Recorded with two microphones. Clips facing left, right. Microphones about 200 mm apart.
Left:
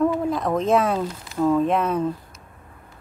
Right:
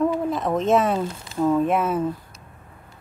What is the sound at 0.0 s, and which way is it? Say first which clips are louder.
Speech: left 1 dB; centre (ahead or behind).